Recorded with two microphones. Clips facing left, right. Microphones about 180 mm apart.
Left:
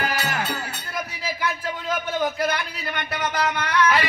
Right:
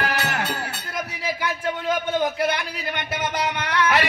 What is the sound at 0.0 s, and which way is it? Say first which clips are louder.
Music: right 1 dB; 65° right (ahead or behind).